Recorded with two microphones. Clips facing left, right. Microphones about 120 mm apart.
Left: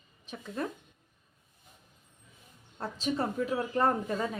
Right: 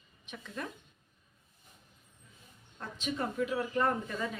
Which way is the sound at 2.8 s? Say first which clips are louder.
Left 4 dB; 35° left (ahead or behind).